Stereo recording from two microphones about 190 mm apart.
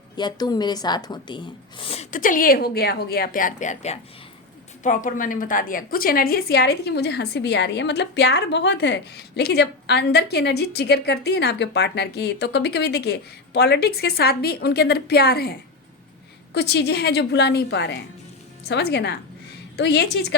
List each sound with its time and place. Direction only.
0.2 s speech: 20° left (ahead or behind)
2.0 s a woman's voice: 45° left (ahead or behind)
16.6 s a woman's voice: 60° left (ahead or behind)